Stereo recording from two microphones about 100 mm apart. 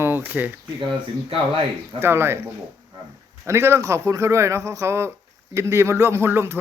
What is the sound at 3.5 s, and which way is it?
A man's voice, 25° right (ahead or behind).